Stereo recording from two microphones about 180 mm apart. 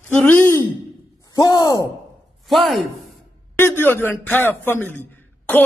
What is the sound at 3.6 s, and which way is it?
A man's voice, 10° left (ahead or behind).